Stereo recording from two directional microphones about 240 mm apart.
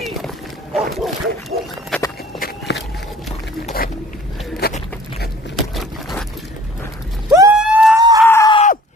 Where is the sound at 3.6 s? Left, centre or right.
Left.